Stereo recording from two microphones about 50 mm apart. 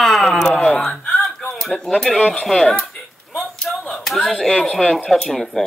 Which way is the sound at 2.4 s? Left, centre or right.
Centre.